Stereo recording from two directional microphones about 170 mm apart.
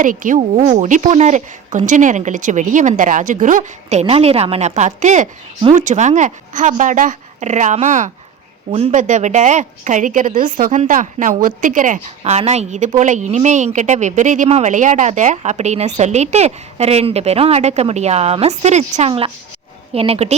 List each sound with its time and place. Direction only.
0.0 s a woman's voice: 50° right (ahead or behind)